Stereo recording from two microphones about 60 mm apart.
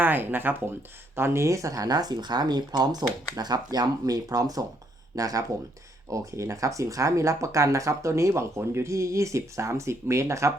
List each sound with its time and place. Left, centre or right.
0.0 s speech: right
1.1 s speech: right
5.1 s speech: right
6.1 s speech: right